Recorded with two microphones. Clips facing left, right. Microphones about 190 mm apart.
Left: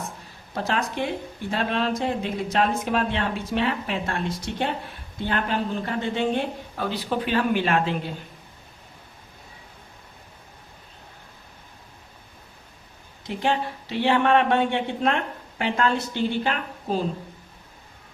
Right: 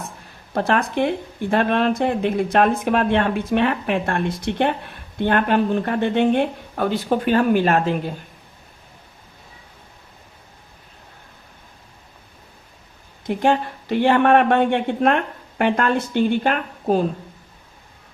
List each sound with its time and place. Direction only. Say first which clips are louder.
0.5 s speech: right 6 dB; 55° right (ahead or behind)
13.2 s speech: right 6 dB; 50° right (ahead or behind)